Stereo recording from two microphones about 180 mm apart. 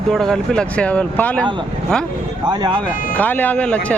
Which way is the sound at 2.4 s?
25° right (ahead or behind).